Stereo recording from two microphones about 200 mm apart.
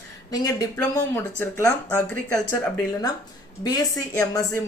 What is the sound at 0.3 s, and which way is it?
Speech, 20° left (ahead or behind).